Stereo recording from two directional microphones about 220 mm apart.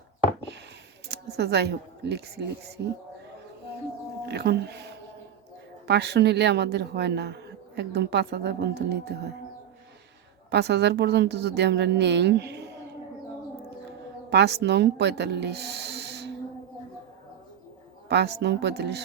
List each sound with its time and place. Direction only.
1.0 s speech: 50° right (ahead or behind)
4.3 s speech: 45° right (ahead or behind)
5.9 s speech: 50° right (ahead or behind)
10.5 s speech: 50° right (ahead or behind)
14.3 s speech: 50° right (ahead or behind)
18.1 s speech: 50° right (ahead or behind)